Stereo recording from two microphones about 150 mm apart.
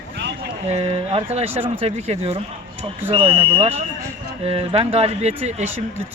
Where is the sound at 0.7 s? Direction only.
45° right (ahead or behind).